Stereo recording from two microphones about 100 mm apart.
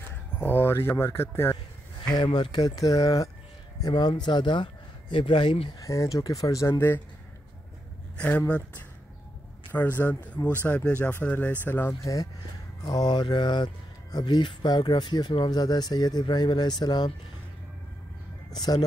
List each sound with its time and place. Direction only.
0.1 s speech: 20° left (ahead or behind)
2.0 s speech: 45° left (ahead or behind)
3.8 s speech: 45° left (ahead or behind)
5.8 s speech: 35° left (ahead or behind)
8.2 s speech: 15° left (ahead or behind)
11.9 s speech: 35° left (ahead or behind)
18.5 s speech: 40° left (ahead or behind)